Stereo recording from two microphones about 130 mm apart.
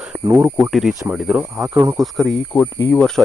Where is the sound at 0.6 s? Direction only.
Centre (ahead or behind).